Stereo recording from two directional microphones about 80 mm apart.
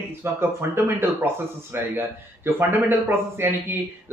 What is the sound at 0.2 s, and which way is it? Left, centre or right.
Speech, right.